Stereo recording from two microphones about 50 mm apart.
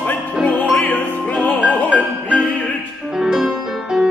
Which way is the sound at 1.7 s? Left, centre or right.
Left.